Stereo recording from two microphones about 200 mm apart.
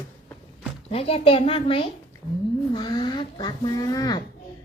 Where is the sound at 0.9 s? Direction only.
30° left (ahead or behind).